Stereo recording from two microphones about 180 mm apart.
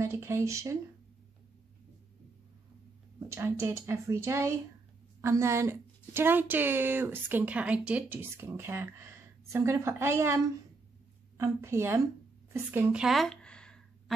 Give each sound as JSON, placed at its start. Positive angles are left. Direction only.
{"t": 0.0, "sound": "a woman's voice", "side_deg": -15}
{"t": 3.3, "sound": "a woman's voice", "side_deg": -15}
{"t": 12.5, "sound": "a sound", "side_deg": -10}